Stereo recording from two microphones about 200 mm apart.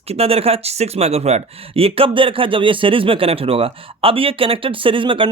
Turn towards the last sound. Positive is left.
turn(degrees=-25)  # may be behind; listen again after turning